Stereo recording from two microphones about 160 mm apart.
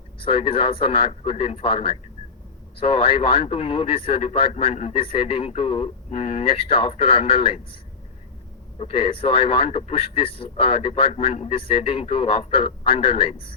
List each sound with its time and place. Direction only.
0.2 s speech: 35° left (ahead or behind)
8.8 s speech: 35° left (ahead or behind)